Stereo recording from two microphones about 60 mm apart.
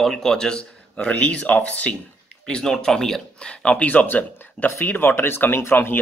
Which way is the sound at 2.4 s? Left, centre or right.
Centre.